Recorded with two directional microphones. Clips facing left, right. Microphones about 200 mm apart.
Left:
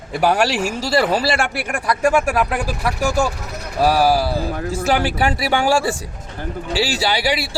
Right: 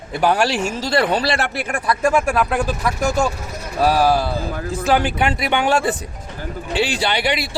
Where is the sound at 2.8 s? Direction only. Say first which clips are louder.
Even; 30° left (ahead or behind).